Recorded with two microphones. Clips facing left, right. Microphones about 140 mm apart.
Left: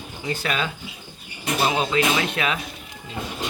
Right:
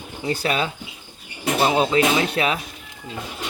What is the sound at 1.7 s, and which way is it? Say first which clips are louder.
Speech: right 3 dB; 30° right (ahead or behind).